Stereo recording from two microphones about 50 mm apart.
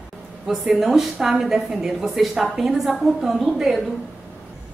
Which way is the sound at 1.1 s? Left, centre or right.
Centre.